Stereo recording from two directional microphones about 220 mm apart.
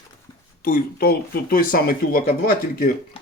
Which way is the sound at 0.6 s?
40° left (ahead or behind).